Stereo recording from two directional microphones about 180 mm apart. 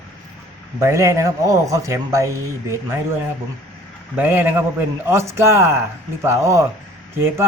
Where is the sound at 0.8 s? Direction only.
15° right (ahead or behind).